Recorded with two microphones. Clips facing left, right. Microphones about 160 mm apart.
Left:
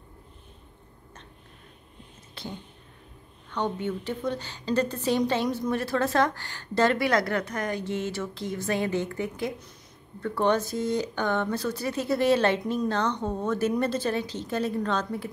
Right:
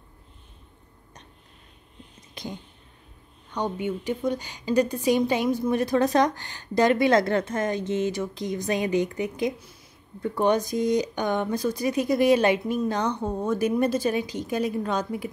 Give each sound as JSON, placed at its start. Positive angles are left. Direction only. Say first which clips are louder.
{"t": 2.3, "sound": "whispering", "louder": "right 2 dB", "side_deg": -15}
{"t": 3.4, "sound": "a woman's voice", "louder": "right 1 dB", "side_deg": -15}